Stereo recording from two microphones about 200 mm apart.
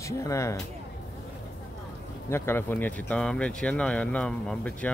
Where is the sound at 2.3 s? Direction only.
10° left (ahead or behind).